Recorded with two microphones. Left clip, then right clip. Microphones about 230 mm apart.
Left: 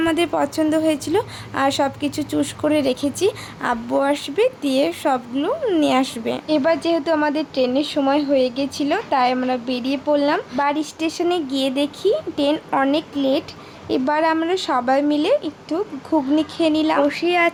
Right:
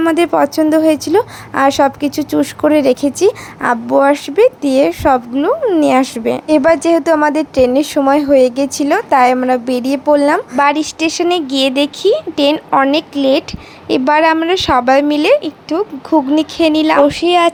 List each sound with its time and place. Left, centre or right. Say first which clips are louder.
0.0 s speech: right 7 dB; right